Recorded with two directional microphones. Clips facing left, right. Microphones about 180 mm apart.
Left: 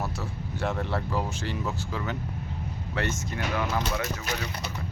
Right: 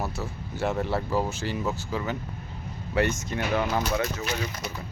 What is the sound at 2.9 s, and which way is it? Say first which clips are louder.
Speech: right 6 dB; 15° right (ahead or behind).